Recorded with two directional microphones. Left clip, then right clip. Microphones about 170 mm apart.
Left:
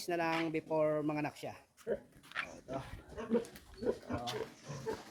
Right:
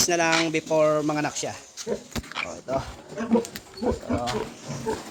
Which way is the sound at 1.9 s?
35° left (ahead or behind).